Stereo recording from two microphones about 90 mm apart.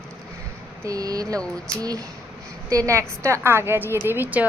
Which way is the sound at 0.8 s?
40° right (ahead or behind).